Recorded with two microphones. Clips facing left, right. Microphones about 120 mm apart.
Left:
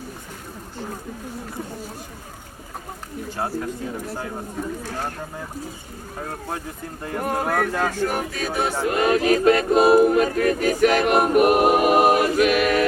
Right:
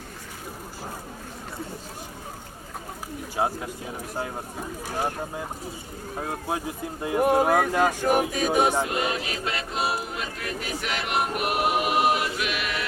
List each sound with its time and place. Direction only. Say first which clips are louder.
3.3 s speech: even; 15° right (ahead or behind)
4.9 s speech: right 1 dB; 15° right (ahead or behind)
7.0 s speech: right 4 dB; 15° right (ahead or behind)
8.9 s a sound: left 10 dB; 50° left (ahead or behind)